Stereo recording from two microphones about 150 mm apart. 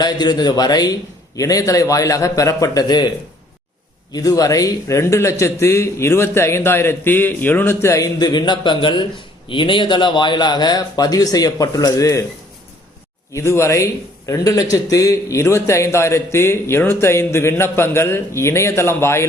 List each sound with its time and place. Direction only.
0.0 s a man's voice: 25° left (ahead or behind)
4.1 s a man's voice: 25° left (ahead or behind)
13.3 s a man's voice: 20° left (ahead or behind)